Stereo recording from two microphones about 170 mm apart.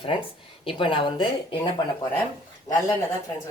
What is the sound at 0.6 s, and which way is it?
Speech, 30° left (ahead or behind).